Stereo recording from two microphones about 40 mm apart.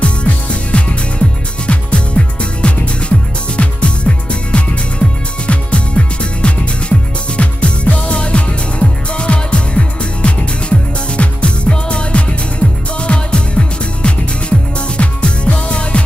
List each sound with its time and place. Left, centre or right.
0.0 s music: left